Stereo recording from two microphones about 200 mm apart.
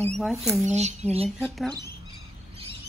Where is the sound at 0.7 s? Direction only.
35° right (ahead or behind).